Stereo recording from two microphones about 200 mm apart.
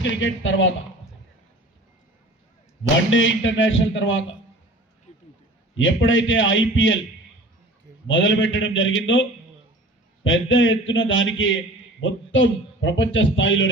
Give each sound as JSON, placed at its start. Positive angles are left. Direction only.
{"t": 0.0, "sound": "a man's voice", "side_deg": 70}
{"t": 3.1, "sound": "a man's voice", "side_deg": 70}
{"t": 5.7, "sound": "a man's voice", "side_deg": 70}
{"t": 8.0, "sound": "a man's voice", "side_deg": 70}
{"t": 10.2, "sound": "a man's voice", "side_deg": 75}